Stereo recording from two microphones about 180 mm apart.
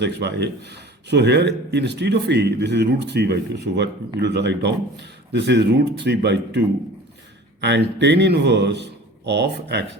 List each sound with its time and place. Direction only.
0.0 s a man's voice: 70° right (ahead or behind)